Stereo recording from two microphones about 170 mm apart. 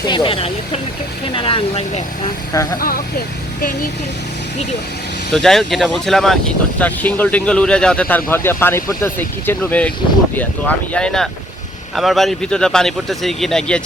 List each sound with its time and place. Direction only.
0.1 s speech: 30° left (ahead or behind)
2.5 s speech: 20° left (ahead or behind)
5.3 s speech: 5° left (ahead or behind)